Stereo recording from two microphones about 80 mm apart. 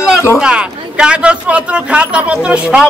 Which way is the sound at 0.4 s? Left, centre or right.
Centre.